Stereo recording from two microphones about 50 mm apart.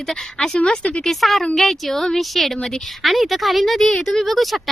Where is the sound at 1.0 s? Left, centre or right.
Centre.